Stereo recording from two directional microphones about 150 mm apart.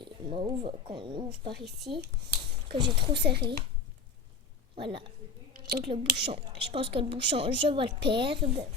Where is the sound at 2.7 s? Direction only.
30° right (ahead or behind).